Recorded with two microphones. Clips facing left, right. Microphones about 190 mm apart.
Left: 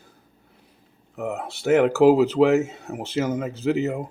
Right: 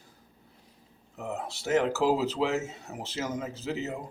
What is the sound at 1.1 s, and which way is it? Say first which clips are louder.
Speech: left 6 dB; 60° left (ahead or behind).